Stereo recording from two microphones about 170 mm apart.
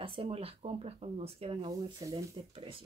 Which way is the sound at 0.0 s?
30° right (ahead or behind).